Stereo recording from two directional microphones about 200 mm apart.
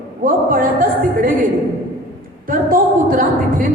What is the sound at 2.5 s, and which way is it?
Speech, 45° right (ahead or behind).